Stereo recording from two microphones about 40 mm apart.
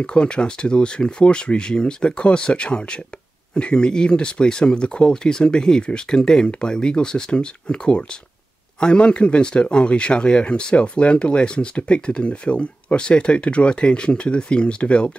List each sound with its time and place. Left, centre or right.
0.0 s speech: left